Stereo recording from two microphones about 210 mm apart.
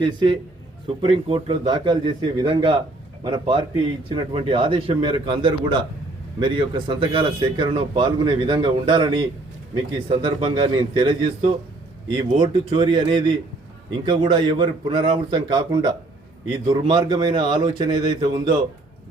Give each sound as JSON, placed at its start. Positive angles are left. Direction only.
{"t": 0.0, "sound": "speech", "side_deg": -20}